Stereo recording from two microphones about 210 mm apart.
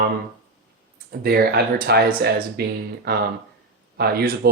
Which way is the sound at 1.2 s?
50° right (ahead or behind).